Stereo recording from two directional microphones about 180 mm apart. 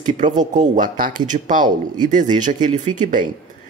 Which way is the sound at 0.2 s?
45° right (ahead or behind).